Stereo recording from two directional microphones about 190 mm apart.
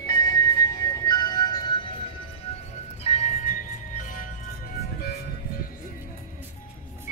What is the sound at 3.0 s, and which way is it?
Music, 35° left (ahead or behind).